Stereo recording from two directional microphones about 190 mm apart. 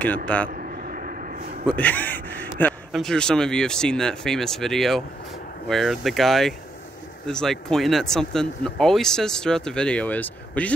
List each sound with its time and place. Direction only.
0.0 s speech: 5° left (ahead or behind)
0.5 s a sound: 45° right (ahead or behind)
1.7 s speech: 10° left (ahead or behind)